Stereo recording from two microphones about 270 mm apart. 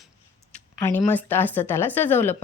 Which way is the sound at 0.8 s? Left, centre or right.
Centre.